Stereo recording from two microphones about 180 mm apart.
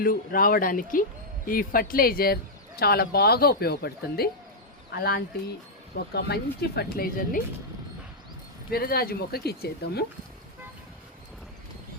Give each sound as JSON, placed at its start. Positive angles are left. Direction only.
{"t": 0.0, "sound": "speech", "side_deg": 55}
{"t": 8.7, "sound": "speech", "side_deg": 60}